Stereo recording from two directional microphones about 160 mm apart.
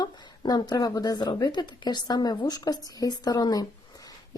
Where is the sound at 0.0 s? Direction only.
25° left (ahead or behind).